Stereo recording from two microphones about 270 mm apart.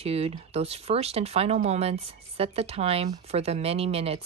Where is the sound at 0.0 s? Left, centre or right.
Right.